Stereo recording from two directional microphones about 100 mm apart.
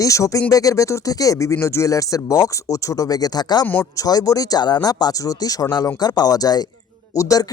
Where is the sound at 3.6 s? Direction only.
20° left (ahead or behind).